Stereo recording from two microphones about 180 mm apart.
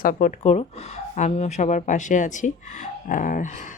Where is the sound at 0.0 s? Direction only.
50° left (ahead or behind).